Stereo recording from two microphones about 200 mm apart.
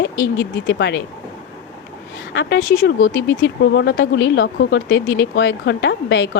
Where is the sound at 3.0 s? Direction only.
75° left (ahead or behind).